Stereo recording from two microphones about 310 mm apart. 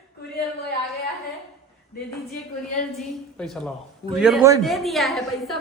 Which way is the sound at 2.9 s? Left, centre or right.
Centre.